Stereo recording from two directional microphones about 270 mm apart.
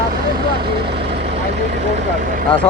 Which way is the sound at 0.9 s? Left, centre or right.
Right.